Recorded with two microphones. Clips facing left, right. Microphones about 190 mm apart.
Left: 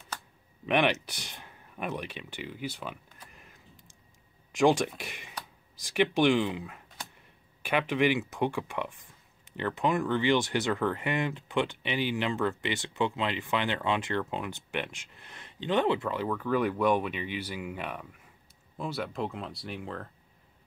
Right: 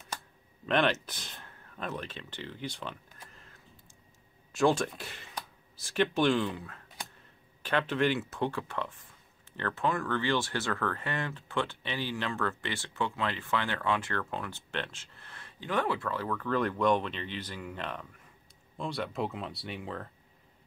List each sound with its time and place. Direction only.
0.7 s speech: 15° left (ahead or behind)